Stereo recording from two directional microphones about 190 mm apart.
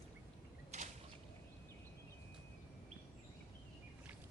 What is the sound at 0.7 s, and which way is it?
Whip, 35° right (ahead or behind).